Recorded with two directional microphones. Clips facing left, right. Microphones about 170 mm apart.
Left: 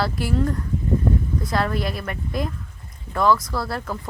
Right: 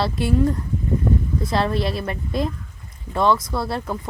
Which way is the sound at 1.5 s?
25° right (ahead or behind).